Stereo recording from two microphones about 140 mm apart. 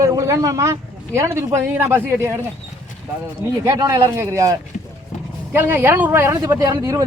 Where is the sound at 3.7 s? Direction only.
20° right (ahead or behind).